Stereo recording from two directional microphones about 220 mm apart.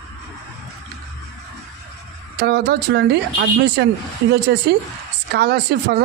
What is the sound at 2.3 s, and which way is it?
Speech, 50° right (ahead or behind).